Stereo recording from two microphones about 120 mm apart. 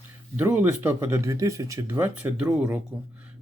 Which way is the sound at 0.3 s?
15° right (ahead or behind).